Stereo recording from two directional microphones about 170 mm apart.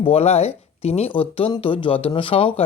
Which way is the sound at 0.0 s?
35° left (ahead or behind).